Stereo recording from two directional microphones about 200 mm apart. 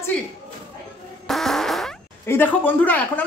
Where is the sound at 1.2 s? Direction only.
Centre (ahead or behind).